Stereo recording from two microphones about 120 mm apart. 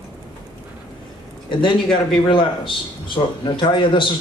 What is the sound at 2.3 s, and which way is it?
A man's voice, 45° left (ahead or behind).